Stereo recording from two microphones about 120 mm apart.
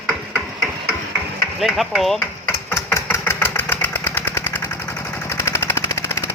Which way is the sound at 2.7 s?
25° left (ahead or behind).